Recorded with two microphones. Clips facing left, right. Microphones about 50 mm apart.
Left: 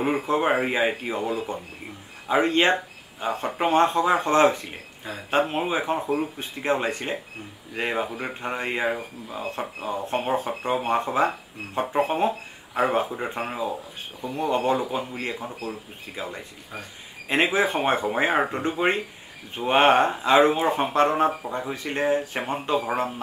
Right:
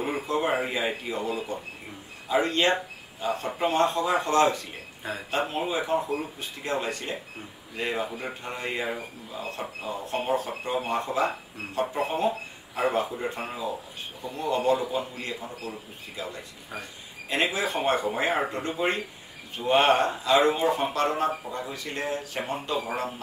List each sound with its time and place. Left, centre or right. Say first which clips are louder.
0.0 s speech: left 4 dB; left